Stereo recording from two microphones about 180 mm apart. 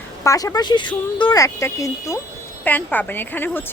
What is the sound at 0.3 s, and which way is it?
A woman's voice, 20° left (ahead or behind).